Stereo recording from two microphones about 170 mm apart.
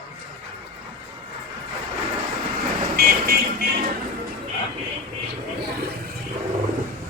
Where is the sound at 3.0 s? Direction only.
60° right (ahead or behind).